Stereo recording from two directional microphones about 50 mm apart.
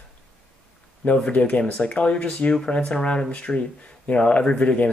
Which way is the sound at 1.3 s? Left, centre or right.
Left.